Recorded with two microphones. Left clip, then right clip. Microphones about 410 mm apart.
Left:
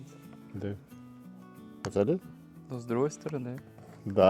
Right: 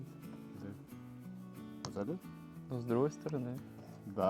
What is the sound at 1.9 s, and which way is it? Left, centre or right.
Speech, left.